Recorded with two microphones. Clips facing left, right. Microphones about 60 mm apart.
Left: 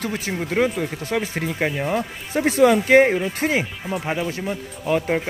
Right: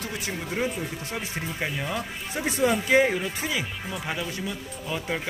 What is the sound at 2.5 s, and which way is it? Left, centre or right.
Speech, left.